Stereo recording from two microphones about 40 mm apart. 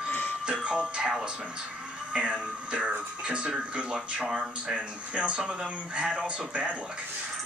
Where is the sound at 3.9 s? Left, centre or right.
Centre.